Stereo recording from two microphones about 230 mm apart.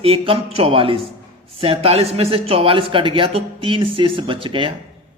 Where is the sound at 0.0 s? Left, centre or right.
Right.